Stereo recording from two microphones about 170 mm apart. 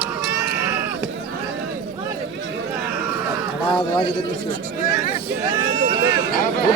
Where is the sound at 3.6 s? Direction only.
30° left (ahead or behind).